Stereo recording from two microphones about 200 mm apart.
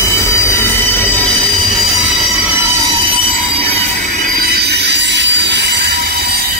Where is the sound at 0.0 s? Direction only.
15° left (ahead or behind).